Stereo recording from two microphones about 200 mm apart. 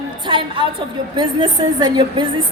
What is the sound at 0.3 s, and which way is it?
A woman's voice, 25° right (ahead or behind).